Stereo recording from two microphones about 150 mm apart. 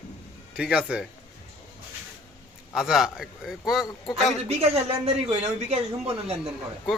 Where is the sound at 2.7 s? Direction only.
Centre (ahead or behind).